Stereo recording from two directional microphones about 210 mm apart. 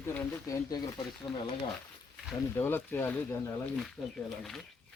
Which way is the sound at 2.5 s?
10° left (ahead or behind).